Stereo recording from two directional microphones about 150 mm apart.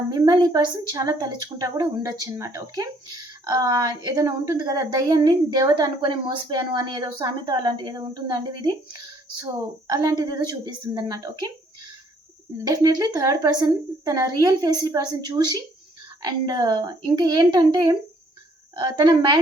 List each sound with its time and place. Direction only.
0.1 s a woman's voice: 25° right (ahead or behind)
12.6 s a woman's voice: 25° right (ahead or behind)